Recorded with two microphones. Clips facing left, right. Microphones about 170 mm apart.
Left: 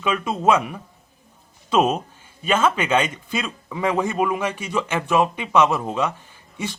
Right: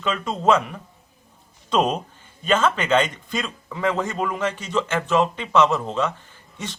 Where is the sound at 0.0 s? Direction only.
10° left (ahead or behind).